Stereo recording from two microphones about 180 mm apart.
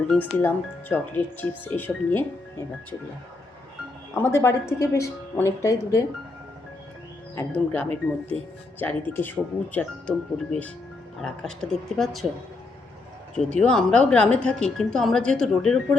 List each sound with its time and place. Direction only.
0.1 s speech: 10° left (ahead or behind)
4.1 s speech: 15° left (ahead or behind)
7.3 s a woman's voice: 10° left (ahead or behind)
13.3 s a woman's voice: 5° left (ahead or behind)